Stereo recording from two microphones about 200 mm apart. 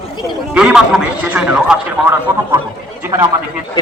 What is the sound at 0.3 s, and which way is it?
A man's voice, 5° right (ahead or behind).